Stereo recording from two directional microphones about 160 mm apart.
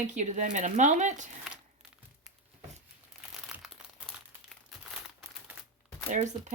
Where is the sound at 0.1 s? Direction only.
50° right (ahead or behind).